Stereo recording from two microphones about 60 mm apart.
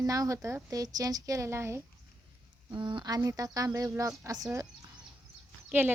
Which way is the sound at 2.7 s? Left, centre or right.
Right.